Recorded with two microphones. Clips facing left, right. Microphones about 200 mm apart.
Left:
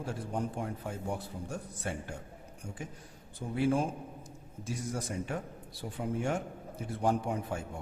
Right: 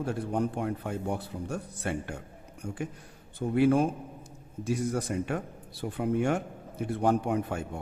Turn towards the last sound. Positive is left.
turn(degrees=-65)  # may be behind; listen again after turning